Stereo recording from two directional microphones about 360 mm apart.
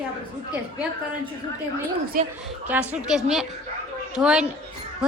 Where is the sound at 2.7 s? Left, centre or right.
Centre.